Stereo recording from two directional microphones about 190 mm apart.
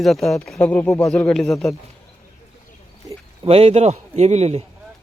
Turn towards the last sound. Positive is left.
turn(degrees=-35)  # may be behind; listen again after turning